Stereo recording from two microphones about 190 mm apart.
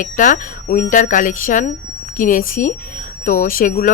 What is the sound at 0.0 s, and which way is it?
Speech, 45° left (ahead or behind).